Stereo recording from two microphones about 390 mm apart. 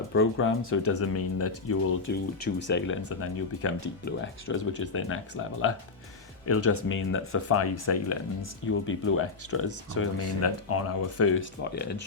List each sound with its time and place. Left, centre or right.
0.1 s speech: left